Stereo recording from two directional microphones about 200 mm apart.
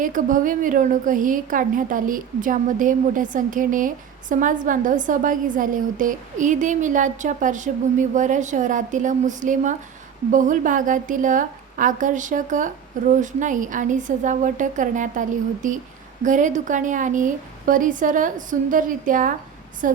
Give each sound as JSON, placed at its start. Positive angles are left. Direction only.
{"t": 0.0, "sound": "a woman's voice", "side_deg": -40}